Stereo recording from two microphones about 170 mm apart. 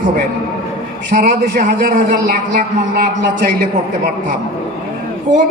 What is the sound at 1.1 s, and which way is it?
A man's voice, 55° right (ahead or behind).